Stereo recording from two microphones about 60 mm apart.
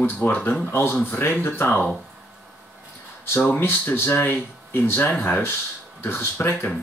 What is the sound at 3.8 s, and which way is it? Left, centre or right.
Speech, left.